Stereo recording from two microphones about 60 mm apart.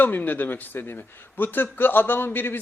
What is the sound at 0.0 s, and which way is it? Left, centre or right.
Speech, left.